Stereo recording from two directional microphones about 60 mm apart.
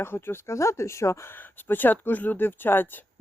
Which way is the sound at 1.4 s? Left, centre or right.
Left.